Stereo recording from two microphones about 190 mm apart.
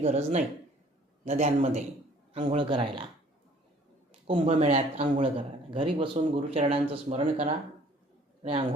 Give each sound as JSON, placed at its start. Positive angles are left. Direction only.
{"t": 0.0, "sound": "speech", "side_deg": -35}
{"t": 4.3, "sound": "speech", "side_deg": -30}